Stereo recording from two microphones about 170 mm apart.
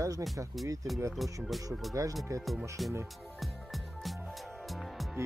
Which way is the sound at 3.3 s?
Centre (ahead or behind).